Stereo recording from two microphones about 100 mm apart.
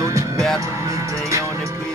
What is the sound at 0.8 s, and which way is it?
Music, 30° right (ahead or behind).